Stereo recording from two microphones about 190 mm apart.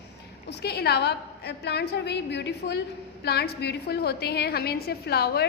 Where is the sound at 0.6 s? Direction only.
60° left (ahead or behind).